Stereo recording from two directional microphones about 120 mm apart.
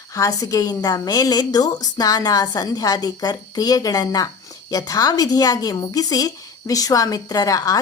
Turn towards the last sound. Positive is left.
turn(degrees=30)  # may be behind; listen again after turning